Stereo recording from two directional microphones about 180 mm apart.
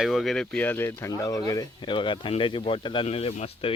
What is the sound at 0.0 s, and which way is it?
Speech, centre (ahead or behind).